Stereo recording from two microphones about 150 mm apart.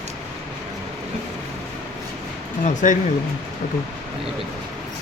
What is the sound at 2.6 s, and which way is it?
Speech, 60° left (ahead or behind).